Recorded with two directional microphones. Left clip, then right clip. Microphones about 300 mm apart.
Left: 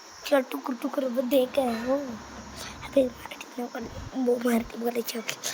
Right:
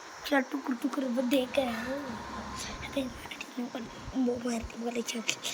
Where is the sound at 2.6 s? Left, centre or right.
Centre.